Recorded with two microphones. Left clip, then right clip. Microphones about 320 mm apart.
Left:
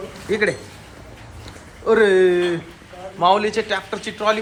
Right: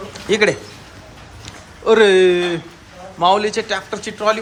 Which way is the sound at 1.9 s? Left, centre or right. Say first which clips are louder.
Right 3 dB; centre.